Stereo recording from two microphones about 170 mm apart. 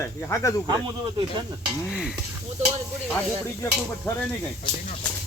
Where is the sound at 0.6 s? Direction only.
25° right (ahead or behind).